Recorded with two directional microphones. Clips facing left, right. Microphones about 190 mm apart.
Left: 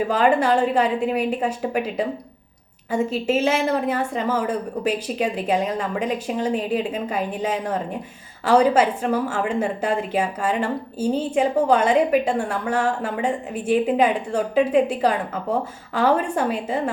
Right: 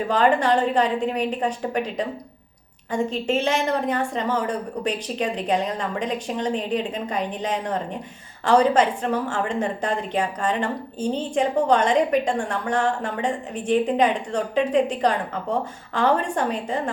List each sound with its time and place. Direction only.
0.1 s a woman's voice: 5° left (ahead or behind)